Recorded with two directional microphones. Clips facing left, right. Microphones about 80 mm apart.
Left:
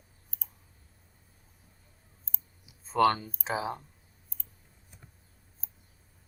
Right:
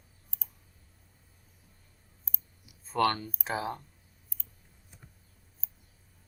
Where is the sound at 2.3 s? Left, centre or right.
Left.